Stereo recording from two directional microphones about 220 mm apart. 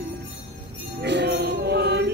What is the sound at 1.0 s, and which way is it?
Music, 50° right (ahead or behind).